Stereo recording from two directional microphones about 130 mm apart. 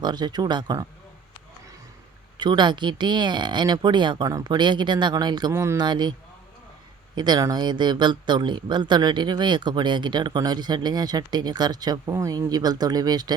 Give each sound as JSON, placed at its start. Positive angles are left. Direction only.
{"t": 0.0, "sound": "speech", "side_deg": -35}
{"t": 2.4, "sound": "speech", "side_deg": -35}
{"t": 7.2, "sound": "speech", "side_deg": -30}